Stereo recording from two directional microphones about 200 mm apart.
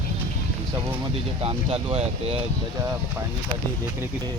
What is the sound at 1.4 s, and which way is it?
Speech, 30° right (ahead or behind).